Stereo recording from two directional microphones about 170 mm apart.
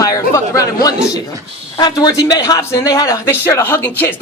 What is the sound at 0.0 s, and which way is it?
Chatter, 20° left (ahead or behind).